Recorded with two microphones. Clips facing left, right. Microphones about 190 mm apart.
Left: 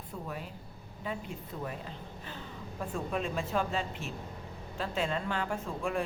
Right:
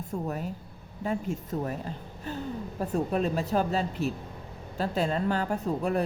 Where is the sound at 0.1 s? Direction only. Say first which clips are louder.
Right 8 dB; 45° right (ahead or behind).